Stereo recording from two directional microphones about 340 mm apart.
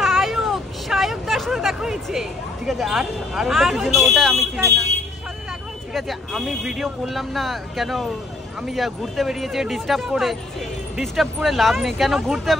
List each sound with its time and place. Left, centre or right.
0.0 s speech: centre
5.9 s speech: centre